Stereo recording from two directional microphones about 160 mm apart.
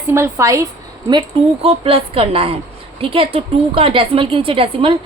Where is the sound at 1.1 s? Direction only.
35° right (ahead or behind).